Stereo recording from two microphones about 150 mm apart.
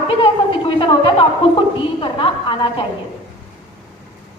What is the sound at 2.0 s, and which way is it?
Speech, 35° left (ahead or behind).